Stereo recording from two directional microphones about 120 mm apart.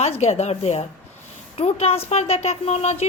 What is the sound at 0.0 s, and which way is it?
Speech, 60° left (ahead or behind).